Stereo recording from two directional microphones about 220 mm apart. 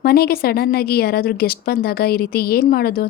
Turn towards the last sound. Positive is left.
turn(degrees=45)  # may be behind; listen again after turning